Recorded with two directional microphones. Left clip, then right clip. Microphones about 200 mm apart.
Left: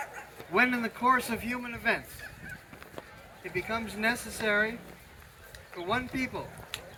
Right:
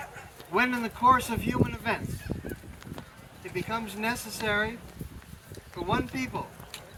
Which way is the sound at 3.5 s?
15° left (ahead or behind).